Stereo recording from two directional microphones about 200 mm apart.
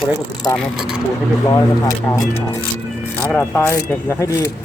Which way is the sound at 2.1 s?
15° left (ahead or behind).